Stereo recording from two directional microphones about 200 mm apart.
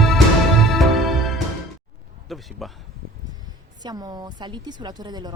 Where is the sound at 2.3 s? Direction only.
Centre (ahead or behind).